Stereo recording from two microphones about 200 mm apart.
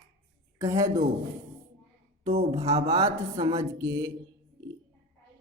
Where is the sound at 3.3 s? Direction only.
15° right (ahead or behind).